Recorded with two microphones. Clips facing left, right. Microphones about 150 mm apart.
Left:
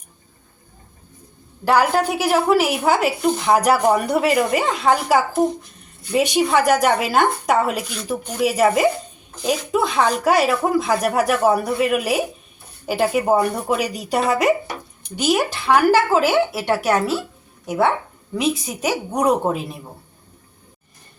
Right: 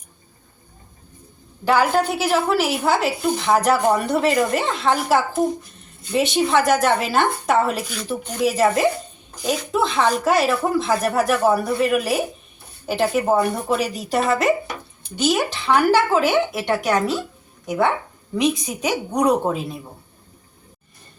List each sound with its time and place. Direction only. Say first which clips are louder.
1.6 s a woman's voice: left 1 dB; 5° left (ahead or behind)